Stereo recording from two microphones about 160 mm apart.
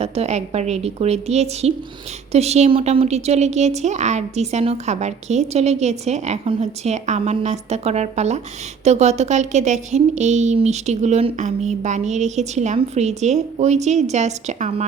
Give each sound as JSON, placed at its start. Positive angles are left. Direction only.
{"t": 0.0, "sound": "a woman's voice", "side_deg": -40}